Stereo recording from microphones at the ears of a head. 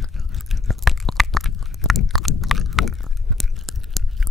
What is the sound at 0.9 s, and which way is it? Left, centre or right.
Crunch, centre.